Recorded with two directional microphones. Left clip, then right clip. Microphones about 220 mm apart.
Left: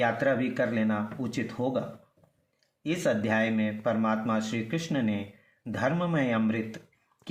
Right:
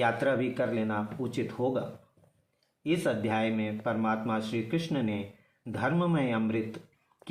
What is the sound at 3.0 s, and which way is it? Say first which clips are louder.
Speech: left 5 dB; 50° left (ahead or behind).